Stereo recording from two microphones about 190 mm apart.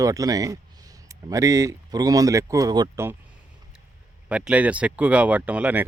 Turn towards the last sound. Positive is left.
turn(degrees=-5)  # may be behind; listen again after turning